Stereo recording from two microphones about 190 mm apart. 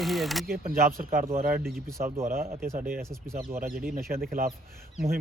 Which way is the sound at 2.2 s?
50° right (ahead or behind).